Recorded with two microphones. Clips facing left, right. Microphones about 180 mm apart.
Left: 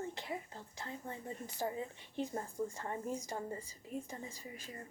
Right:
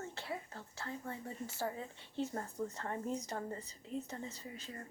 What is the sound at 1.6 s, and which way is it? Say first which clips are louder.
A woman's voice: left 3 dB; 15° left (ahead or behind).